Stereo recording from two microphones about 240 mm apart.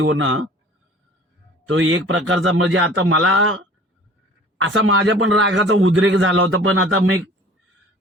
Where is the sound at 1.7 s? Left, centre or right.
Right.